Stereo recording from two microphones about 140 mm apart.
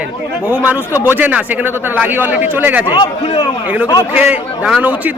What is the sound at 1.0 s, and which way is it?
Speech, 15° right (ahead or behind).